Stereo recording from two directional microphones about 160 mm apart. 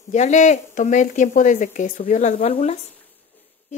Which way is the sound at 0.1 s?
50° left (ahead or behind).